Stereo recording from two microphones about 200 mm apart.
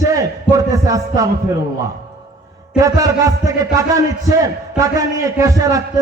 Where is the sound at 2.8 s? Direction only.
15° right (ahead or behind).